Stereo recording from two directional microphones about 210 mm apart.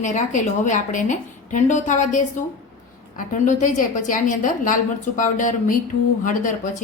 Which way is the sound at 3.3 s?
35° left (ahead or behind).